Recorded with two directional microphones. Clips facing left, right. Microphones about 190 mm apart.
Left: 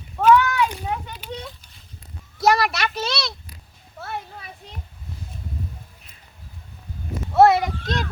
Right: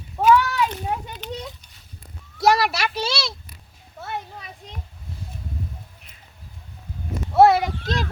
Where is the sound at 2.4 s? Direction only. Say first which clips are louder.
Even; centre (ahead or behind).